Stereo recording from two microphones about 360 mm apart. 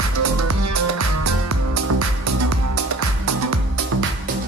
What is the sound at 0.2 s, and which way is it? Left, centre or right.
Music, right.